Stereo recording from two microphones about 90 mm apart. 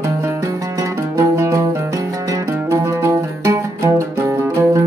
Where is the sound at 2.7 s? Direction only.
30° right (ahead or behind).